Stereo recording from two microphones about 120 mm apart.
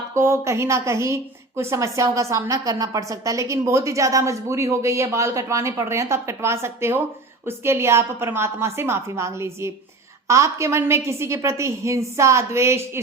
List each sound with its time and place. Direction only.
0.1 s a woman's voice: 25° right (ahead or behind)